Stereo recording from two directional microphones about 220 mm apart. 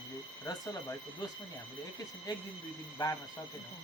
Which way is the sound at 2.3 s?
20° left (ahead or behind).